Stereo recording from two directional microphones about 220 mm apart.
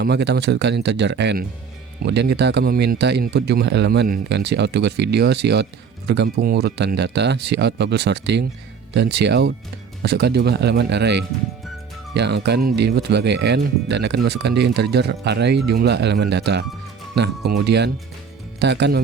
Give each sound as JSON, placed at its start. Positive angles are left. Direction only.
{"t": 0.0, "sound": "speech", "side_deg": -50}